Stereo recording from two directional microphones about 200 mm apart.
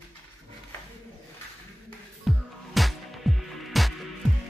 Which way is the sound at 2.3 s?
Centre (ahead or behind).